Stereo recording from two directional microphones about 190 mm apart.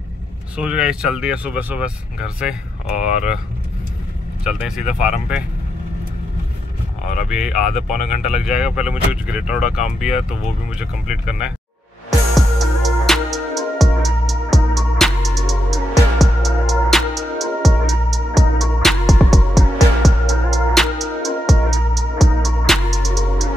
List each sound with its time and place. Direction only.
0.6 s speech: 5° right (ahead or behind)
4.5 s speech: 5° right (ahead or behind)
7.2 s speech: 5° right (ahead or behind)
12.1 s music: centre (ahead or behind)